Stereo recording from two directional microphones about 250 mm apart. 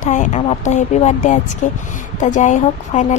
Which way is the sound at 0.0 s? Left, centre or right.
Left.